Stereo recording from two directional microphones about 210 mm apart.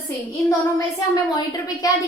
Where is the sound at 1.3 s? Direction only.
15° left (ahead or behind).